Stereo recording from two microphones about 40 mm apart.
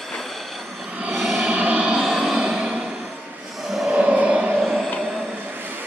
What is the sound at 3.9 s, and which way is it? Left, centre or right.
Music, right.